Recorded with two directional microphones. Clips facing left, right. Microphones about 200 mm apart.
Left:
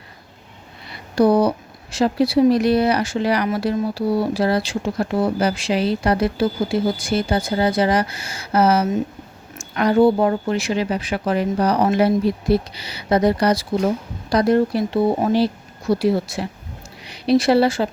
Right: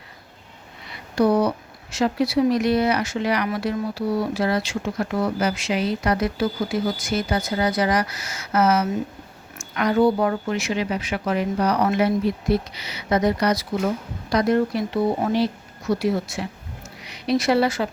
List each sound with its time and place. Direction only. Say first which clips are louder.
0.9 s speech: left 3 dB; 35° left (ahead or behind)